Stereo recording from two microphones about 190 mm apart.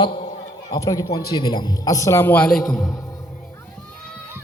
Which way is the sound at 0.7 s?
20° left (ahead or behind).